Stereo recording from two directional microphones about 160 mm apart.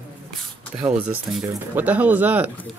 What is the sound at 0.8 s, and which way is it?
Speech, 5° right (ahead or behind).